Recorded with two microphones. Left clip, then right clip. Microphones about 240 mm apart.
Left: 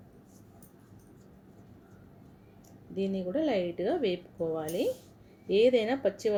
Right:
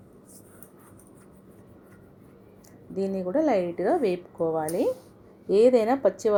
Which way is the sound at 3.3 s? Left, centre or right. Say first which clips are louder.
Right 7 dB; centre.